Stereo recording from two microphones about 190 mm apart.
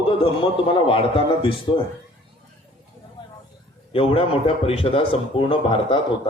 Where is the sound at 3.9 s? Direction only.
30° left (ahead or behind).